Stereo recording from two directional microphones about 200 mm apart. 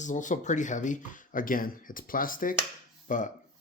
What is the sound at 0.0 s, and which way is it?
Speech, 40° left (ahead or behind).